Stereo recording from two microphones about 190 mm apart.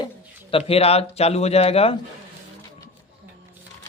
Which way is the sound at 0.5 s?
30° left (ahead or behind).